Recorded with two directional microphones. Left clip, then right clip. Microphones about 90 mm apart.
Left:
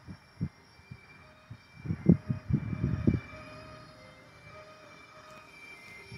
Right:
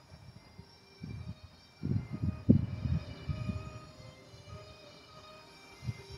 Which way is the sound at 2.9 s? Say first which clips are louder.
Left 11 dB; 45° right (ahead or behind).